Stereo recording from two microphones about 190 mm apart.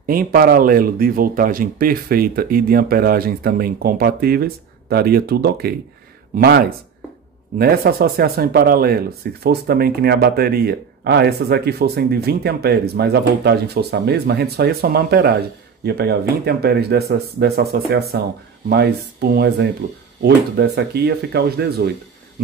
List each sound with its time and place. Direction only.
0.0 s speech: 50° right (ahead or behind)